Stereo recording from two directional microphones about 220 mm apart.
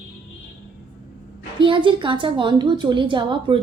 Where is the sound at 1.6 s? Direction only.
20° right (ahead or behind).